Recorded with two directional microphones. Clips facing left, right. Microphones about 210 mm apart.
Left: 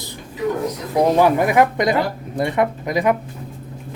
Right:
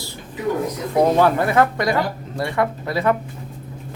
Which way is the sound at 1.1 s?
15° left (ahead or behind).